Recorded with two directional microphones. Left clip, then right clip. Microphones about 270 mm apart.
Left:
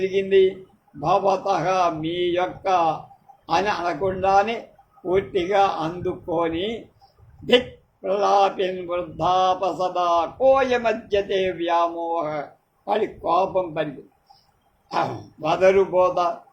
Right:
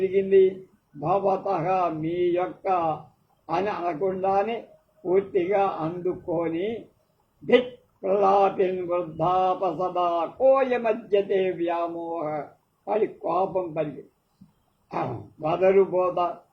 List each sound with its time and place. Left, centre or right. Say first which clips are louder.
0.0 s speech: left 1 dB; left
8.0 s speech: left 1 dB; left
14.8 s speech: left 6 dB; left